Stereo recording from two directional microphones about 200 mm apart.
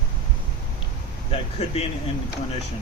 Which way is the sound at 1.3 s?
30° left (ahead or behind).